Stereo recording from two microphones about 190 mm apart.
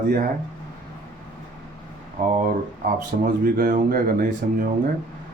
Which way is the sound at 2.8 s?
45° right (ahead or behind).